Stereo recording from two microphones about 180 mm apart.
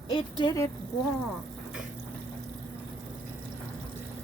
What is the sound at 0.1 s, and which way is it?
Speech, 25° left (ahead or behind).